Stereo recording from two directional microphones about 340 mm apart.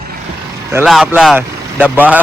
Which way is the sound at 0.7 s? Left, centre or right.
Centre.